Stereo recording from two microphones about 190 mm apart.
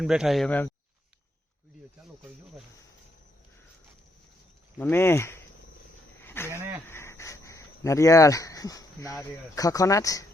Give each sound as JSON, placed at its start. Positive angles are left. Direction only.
{"t": 0.0, "sound": "speech", "side_deg": 0}
{"t": 4.8, "sound": "speech", "side_deg": 10}
{"t": 6.2, "sound": "a sound", "side_deg": 10}
{"t": 6.5, "sound": "speech", "side_deg": -15}
{"t": 6.8, "sound": "speech", "side_deg": 15}